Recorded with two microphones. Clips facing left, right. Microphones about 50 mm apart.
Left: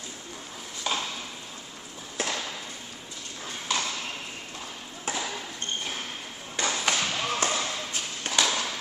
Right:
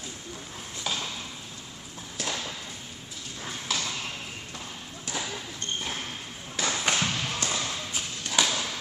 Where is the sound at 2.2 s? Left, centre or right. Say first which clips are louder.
Left 3 dB; left.